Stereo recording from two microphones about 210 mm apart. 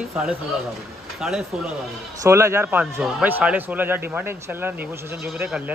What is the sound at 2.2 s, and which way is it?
A man's voice, 10° right (ahead or behind).